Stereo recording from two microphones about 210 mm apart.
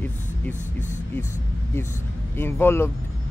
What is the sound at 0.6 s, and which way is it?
Speech, 35° left (ahead or behind).